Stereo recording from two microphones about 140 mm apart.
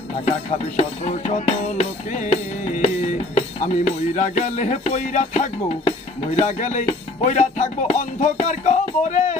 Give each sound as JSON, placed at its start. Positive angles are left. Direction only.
{"t": 0.7, "sound": "music", "side_deg": 50}